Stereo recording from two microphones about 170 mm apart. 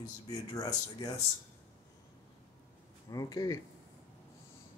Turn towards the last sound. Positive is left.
turn(degrees=20)  # may be behind; listen again after turning